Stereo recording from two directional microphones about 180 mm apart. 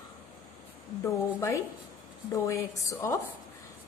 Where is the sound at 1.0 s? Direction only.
15° left (ahead or behind).